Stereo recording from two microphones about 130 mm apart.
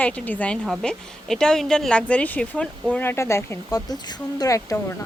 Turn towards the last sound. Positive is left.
turn(degrees=25)  # may be behind; listen again after turning